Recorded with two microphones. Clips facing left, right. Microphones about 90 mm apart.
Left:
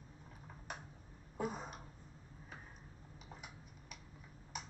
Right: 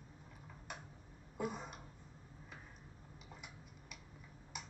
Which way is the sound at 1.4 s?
40° left (ahead or behind).